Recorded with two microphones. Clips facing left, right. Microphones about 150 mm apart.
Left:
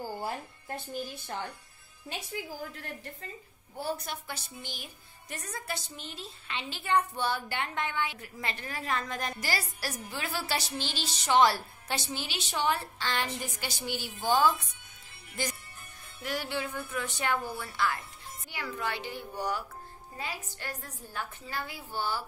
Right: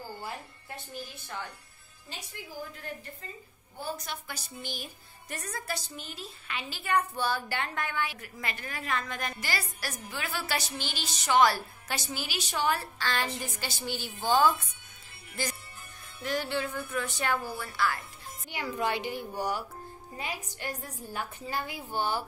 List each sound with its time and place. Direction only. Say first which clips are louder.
2.3 s a woman's voice: left 1 dB; 75° left (ahead or behind)
3.9 s a woman's voice: left 2 dB; 45° left (ahead or behind)
4.3 s a woman's voice: right 1 dB; 20° left (ahead or behind)
16.2 s music: right 3 dB; 10° left (ahead or behind)
17.6 s a woman's voice: right 1 dB; 20° left (ahead or behind)
18.5 s a woman's voice: right 4 dB; 15° right (ahead or behind)